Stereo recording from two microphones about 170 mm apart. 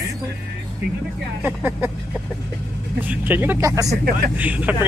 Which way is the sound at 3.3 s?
10° right (ahead or behind).